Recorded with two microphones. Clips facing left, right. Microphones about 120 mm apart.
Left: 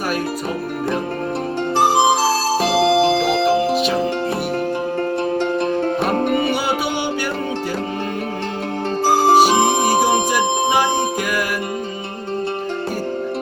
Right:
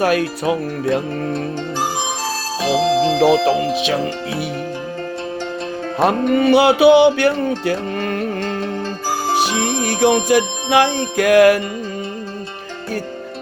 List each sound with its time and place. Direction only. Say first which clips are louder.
0.0 s speech: right 5 dB; 80° right
1.8 s music: left 10 dB; 65° left (ahead or behind)
6.1 s music: right 2 dB; 55° left (ahead or behind)
6.5 s music: right 11 dB; 75° right (ahead or behind)
9.0 s music: left 7 dB; 55° left (ahead or behind)
10.0 s music: right 3 dB; 65° right (ahead or behind)